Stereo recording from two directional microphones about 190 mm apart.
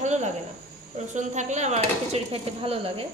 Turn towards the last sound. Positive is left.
turn(degrees=-30)  # may be behind; listen again after turning